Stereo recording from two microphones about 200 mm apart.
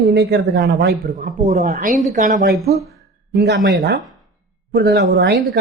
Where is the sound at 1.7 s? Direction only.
40° right (ahead or behind); by 5.3 s 55° right (ahead or behind).